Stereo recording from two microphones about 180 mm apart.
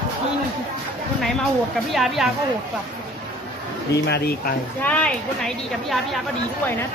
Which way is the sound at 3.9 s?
65° left (ahead or behind).